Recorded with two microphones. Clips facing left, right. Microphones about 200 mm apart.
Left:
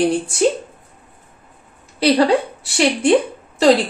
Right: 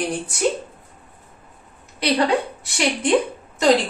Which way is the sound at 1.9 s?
30° left (ahead or behind).